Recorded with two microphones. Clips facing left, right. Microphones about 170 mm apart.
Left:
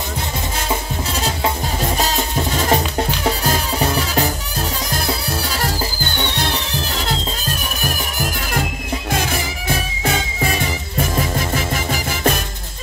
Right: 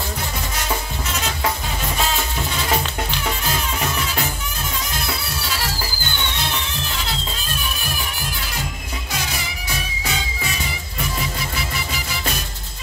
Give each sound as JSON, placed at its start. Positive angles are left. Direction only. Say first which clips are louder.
{"t": 1.1, "sound": "drum", "louder": "left 3 dB", "side_deg": 30}
{"t": 2.0, "sound": "music", "louder": "left 3 dB", "side_deg": 40}
{"t": 9.7, "sound": "music", "louder": "left 8 dB", "side_deg": 55}